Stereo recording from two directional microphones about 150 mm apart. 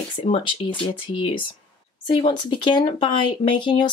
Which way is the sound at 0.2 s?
35° left (ahead or behind).